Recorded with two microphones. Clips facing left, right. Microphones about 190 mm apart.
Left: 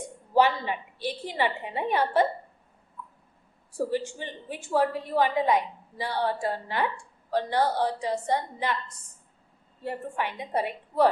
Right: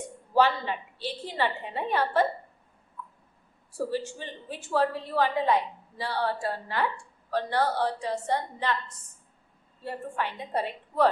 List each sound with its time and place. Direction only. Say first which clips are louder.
0.3 s a woman's voice: left 1 dB; 15° left (ahead or behind)
3.8 s a woman's voice: left 2 dB; 15° left (ahead or behind)
9.8 s a woman's voice: left 1 dB; 15° left (ahead or behind)